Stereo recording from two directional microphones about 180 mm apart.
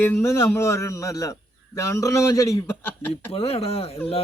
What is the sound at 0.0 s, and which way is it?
A man's voice, 10° left (ahead or behind).